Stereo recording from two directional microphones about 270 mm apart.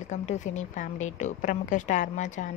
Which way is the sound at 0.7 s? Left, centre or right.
Left.